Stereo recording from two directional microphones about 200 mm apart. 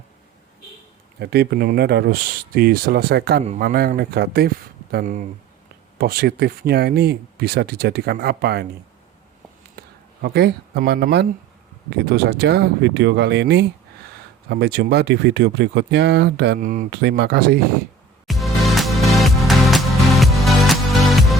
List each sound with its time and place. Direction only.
1.2 s speech: 55° right (ahead or behind)
6.0 s speech: 50° right (ahead or behind)
10.2 s speech: 50° right (ahead or behind)
16.6 s speech: 50° right (ahead or behind)
18.3 s music: centre (ahead or behind)